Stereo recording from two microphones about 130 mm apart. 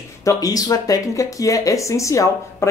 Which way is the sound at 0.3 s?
25° left (ahead or behind).